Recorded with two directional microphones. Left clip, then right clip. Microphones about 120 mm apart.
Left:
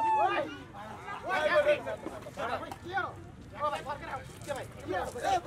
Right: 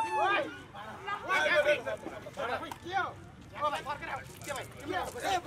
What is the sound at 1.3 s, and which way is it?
Speech, 5° right (ahead or behind).